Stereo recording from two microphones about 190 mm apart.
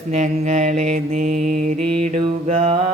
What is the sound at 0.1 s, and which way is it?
Mantra, 40° right (ahead or behind).